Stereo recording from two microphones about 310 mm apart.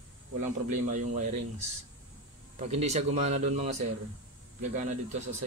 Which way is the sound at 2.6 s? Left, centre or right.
Right.